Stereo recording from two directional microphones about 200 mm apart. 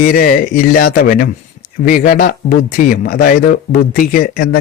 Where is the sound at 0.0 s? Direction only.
45° left (ahead or behind).